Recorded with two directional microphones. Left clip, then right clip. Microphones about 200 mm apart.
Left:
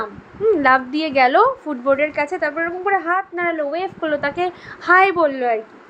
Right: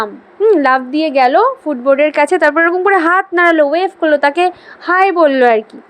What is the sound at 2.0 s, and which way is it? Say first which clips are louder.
A woman's voice: right 9 dB; 35° right (ahead or behind).